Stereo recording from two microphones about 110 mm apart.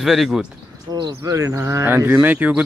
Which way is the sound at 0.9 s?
35° right (ahead or behind).